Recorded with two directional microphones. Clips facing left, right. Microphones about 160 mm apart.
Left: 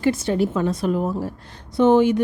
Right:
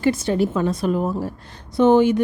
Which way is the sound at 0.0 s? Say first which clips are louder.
Right 1 dB; 35° right (ahead or behind).